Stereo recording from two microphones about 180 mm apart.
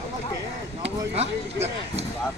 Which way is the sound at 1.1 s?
35° right (ahead or behind).